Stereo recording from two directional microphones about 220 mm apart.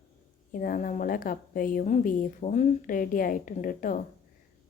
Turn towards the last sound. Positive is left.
turn(degrees=40)  # may be behind; listen again after turning